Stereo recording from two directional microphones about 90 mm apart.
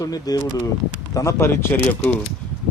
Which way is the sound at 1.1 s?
35° left (ahead or behind).